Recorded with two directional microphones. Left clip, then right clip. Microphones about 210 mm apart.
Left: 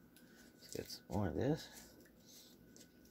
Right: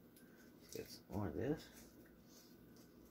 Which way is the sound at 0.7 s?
45° left (ahead or behind).